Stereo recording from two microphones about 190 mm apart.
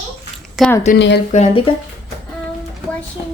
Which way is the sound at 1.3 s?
35° left (ahead or behind).